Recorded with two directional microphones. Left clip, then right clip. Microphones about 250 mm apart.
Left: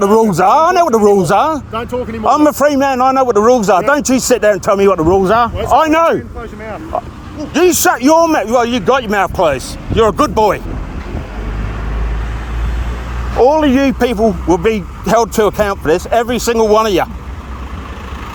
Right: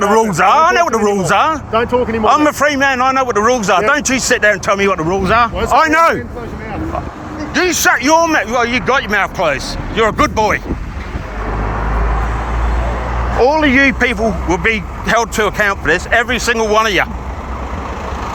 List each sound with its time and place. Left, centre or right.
0.0 s speech: left
1.7 s speech: centre
2.2 s speech: left
7.5 s speech: left
13.4 s speech: left